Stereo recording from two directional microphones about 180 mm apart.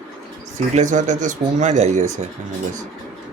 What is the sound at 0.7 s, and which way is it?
A man's voice, 40° right (ahead or behind).